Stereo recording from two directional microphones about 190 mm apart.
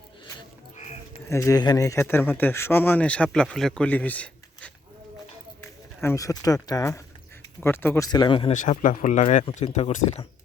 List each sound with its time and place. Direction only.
1.3 s speech: 15° left (ahead or behind)
6.0 s speech: 15° left (ahead or behind)
8.5 s speech: 40° left (ahead or behind)